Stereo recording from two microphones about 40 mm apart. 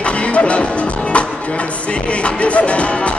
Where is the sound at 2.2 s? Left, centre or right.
Left.